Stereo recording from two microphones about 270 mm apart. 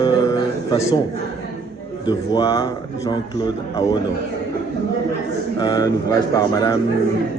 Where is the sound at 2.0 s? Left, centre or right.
Centre.